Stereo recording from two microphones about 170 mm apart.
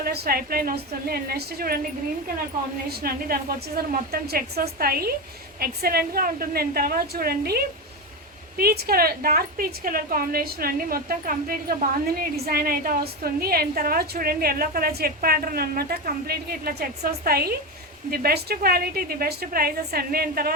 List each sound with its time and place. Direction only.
0.0 s a woman's voice: 65° right (ahead or behind)
2.9 s a woman's voice: 60° right (ahead or behind)